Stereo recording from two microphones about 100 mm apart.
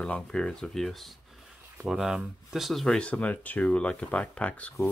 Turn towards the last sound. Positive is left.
turn(degrees=15)  # may be behind; listen again after turning